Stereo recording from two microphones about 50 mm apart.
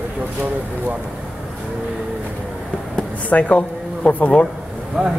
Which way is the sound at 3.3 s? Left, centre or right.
Left.